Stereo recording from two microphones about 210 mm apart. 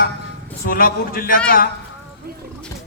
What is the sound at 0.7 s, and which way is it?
Speech, 45° left (ahead or behind).